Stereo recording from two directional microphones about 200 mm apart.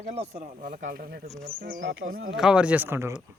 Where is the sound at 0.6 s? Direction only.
45° right (ahead or behind).